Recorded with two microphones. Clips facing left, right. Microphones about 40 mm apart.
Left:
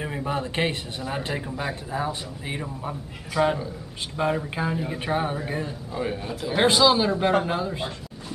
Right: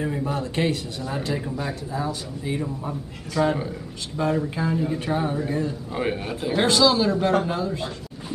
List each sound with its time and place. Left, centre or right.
0.0 s a man's voice: left
2.6 s a man's voice: centre
4.2 s a man's voice: left
4.6 s a man's voice: centre
5.9 s a man's voice: right
6.5 s a man's voice: centre